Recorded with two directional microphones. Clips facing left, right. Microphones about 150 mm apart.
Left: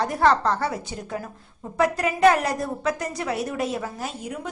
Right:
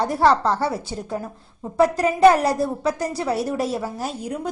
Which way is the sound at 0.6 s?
30° right (ahead or behind).